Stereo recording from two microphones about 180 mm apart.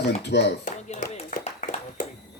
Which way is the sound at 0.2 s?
70° left (ahead or behind).